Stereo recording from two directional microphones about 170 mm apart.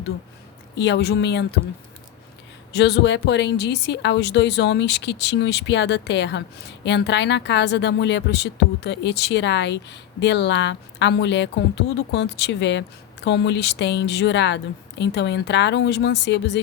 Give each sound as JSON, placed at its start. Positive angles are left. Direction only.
{"t": 0.8, "sound": "a woman's voice", "side_deg": 85}
{"t": 2.7, "sound": "speech", "side_deg": 85}